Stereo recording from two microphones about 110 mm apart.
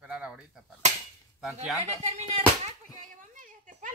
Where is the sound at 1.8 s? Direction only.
90° right.